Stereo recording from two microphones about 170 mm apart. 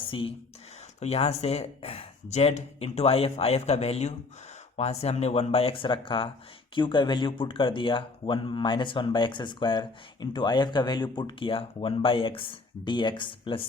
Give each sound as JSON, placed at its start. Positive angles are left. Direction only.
{"t": 0.1, "sound": "speech", "side_deg": 30}